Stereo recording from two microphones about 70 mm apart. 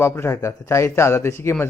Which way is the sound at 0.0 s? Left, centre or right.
Left.